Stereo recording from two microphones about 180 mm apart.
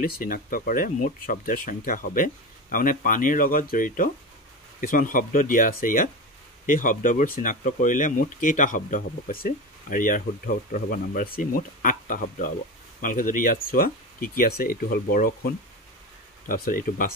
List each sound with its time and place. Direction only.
0.0 s speech: 50° left (ahead or behind)